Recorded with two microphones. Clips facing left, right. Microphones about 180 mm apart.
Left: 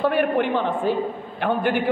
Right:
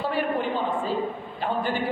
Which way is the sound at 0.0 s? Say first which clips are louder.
Left 6 dB; 60° left (ahead or behind).